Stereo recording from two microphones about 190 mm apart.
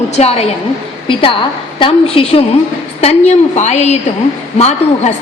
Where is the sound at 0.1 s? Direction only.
35° left (ahead or behind).